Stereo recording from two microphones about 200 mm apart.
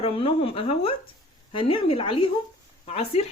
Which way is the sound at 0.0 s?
30° left (ahead or behind).